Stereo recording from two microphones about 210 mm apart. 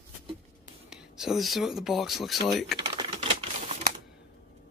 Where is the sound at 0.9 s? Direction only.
5° right (ahead or behind).